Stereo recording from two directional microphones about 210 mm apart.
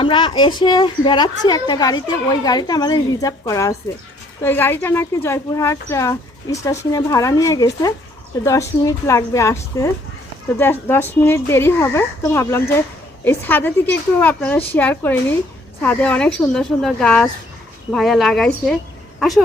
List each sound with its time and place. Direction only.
0.0 s a woman's voice: 25° left (ahead or behind); by 18.7 s centre (ahead or behind)